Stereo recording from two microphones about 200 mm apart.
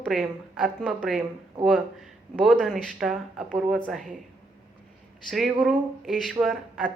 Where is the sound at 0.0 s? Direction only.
Centre (ahead or behind).